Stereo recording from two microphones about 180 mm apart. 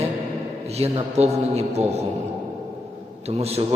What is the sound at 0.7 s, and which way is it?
A man's voice, 35° right (ahead or behind).